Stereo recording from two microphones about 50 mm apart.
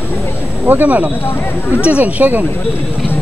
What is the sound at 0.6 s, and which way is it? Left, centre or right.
Speech, right.